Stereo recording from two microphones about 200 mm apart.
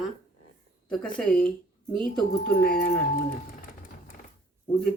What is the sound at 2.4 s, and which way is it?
Speech, 50° left (ahead or behind).